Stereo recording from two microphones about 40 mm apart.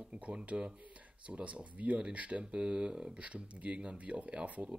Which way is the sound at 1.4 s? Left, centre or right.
Right.